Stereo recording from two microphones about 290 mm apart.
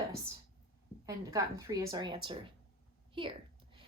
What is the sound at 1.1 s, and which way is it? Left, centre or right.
Speech, centre.